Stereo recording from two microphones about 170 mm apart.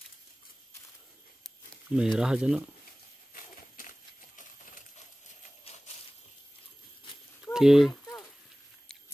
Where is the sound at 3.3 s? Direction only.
50° left (ahead or behind).